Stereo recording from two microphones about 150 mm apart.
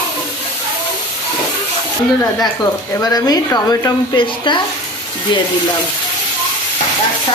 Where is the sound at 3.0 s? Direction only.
25° left (ahead or behind).